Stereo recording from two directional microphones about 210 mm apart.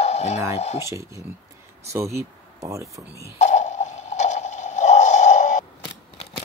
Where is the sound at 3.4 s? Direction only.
35° left (ahead or behind).